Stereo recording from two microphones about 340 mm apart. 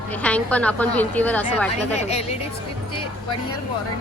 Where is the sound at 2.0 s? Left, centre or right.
Centre.